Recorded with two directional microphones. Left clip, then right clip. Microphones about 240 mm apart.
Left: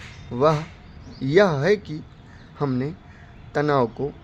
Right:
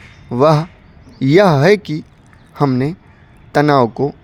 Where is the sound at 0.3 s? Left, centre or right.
Right.